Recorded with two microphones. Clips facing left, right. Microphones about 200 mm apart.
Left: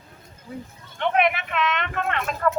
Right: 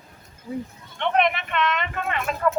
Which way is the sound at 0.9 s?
5° left (ahead or behind).